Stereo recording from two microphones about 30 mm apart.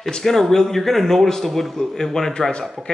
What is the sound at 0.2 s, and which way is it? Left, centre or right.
A man's voice, centre.